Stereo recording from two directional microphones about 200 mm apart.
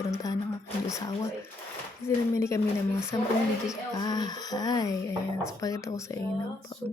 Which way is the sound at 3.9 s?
20° left (ahead or behind).